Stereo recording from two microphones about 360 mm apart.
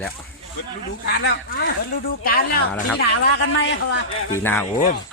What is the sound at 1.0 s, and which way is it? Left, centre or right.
A man's voice, left.